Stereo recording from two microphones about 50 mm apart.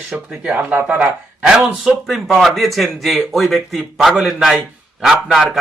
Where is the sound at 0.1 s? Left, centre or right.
Right.